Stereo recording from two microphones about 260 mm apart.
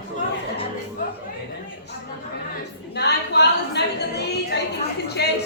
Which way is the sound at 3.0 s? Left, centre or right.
Left.